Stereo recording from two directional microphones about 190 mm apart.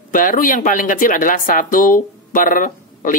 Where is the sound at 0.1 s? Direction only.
45° left (ahead or behind).